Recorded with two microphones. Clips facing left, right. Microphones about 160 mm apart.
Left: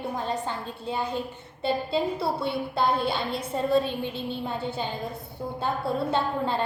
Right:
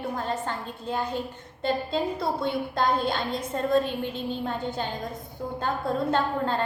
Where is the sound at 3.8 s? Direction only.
45° right (ahead or behind).